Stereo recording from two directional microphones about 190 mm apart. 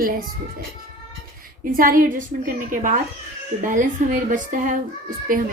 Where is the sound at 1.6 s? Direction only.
45° right (ahead or behind).